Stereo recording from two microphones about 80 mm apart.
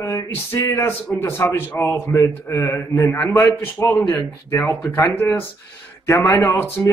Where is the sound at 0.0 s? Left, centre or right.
Left.